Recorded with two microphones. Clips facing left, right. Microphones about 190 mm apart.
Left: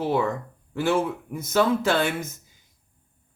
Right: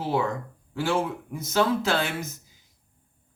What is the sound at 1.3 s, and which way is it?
Speech, 55° left (ahead or behind).